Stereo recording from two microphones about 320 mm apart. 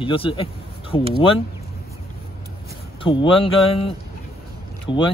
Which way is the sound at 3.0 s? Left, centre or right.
Centre.